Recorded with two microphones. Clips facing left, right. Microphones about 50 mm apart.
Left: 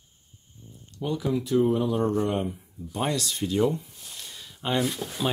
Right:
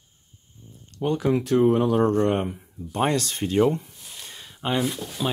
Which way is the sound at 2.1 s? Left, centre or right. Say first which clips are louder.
Right 4 dB; right.